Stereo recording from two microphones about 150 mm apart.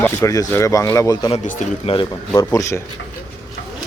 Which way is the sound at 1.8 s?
35° left (ahead or behind).